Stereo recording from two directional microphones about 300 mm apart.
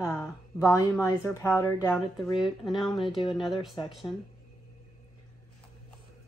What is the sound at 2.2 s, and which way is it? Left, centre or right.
Speech, centre.